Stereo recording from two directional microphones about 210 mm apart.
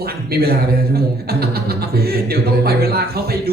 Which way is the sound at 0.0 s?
45° right (ahead or behind).